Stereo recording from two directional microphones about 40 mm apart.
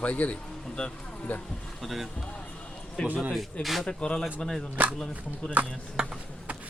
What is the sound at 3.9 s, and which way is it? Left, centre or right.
Speech, left.